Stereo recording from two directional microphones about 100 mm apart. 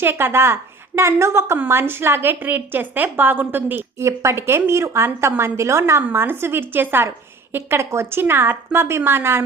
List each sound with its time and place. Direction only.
0.0 s a woman's voice: 20° right (ahead or behind)